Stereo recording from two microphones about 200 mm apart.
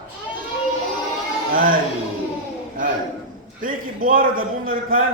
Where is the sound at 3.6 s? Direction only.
45° right (ahead or behind).